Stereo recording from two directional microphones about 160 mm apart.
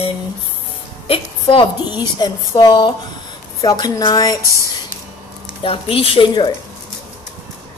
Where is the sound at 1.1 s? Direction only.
30° left (ahead or behind).